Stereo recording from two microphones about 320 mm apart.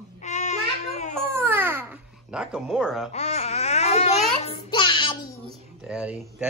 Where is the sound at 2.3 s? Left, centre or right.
Centre.